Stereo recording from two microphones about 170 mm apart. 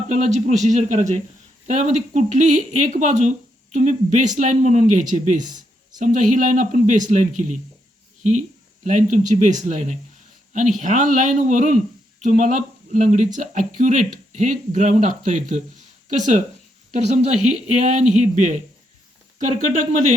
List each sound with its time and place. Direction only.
0.1 s speech: 45° right (ahead or behind)